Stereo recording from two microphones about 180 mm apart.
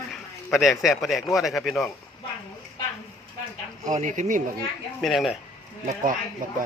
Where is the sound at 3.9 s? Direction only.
40° right (ahead or behind).